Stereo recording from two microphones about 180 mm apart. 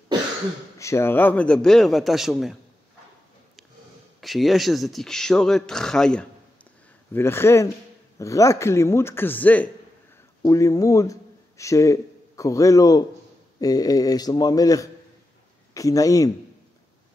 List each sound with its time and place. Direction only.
0.7 s speech: 15° left (ahead or behind); by 2.5 s centre (ahead or behind)
4.2 s a man's voice: centre (ahead or behind); by 16.3 s 20° left (ahead or behind)